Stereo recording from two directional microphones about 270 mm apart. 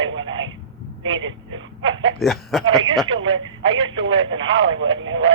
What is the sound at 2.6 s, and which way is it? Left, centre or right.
Speech, centre.